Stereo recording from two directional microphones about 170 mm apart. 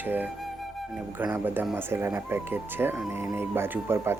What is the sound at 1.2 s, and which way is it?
Speech, 10° right (ahead or behind).